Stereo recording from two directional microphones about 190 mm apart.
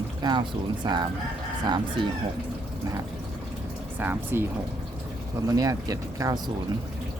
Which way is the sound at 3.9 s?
10° right (ahead or behind).